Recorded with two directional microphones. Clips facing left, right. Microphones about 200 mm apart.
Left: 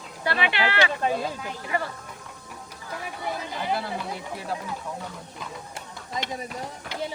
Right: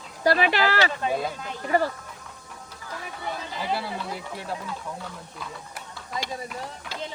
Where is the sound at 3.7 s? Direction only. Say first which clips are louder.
Even; 5° right (ahead or behind).